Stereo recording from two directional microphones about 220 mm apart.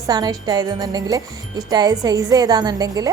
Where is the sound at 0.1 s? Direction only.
15° right (ahead or behind).